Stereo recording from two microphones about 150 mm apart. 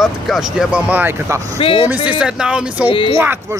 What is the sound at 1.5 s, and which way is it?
Speech, 35° left (ahead or behind).